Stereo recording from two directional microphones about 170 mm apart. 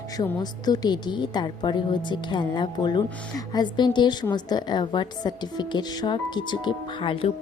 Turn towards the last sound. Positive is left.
turn(degrees=30)  # may be behind; listen again after turning